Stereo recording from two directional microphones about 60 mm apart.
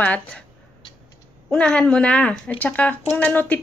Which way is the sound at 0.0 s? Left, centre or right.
Left.